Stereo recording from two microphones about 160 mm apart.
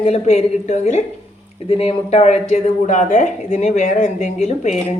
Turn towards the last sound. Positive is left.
turn(degrees=45)  # may be behind; listen again after turning